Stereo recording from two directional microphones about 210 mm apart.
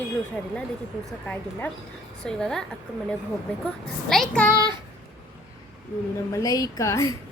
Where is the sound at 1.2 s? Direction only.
5° left (ahead or behind).